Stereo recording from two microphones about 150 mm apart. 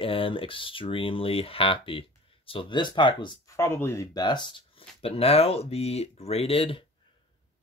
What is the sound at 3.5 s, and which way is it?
Speech, 15° left (ahead or behind).